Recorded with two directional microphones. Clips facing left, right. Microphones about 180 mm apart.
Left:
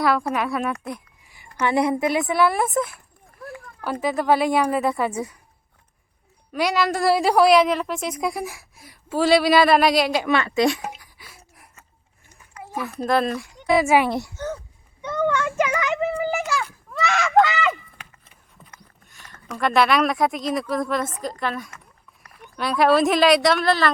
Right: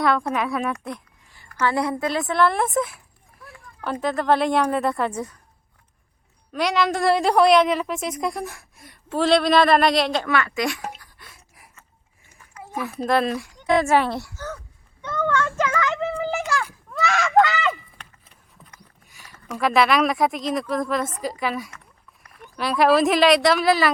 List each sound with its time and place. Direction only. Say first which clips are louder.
0.0 s a woman's voice: even; 5° left (ahead or behind)
1.5 s a woman's voice: left 2 dB; 20° left (ahead or behind)
2.3 s a woman's voice: right 3 dB; 5° left (ahead or behind)
3.4 s a sound: left 1 dB; centre (ahead or behind)
4.0 s a woman's voice: left 1 dB; 5° left (ahead or behind)
6.5 s a woman's voice: even; centre (ahead or behind)
10.2 s a woman's voice: left 4 dB; 25° left (ahead or behind)
11.2 s a sound: left 1 dB; centre (ahead or behind)
12.3 s a child's voice: even; centre (ahead or behind); by 16.0 s 15° left (ahead or behind)
16.1 s a sound: left 1 dB; 5° left (ahead or behind)
19.1 s a woman's voice: right 2 dB; 5° right (ahead or behind)